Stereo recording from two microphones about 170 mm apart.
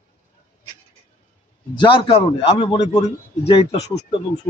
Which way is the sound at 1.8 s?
30° left (ahead or behind).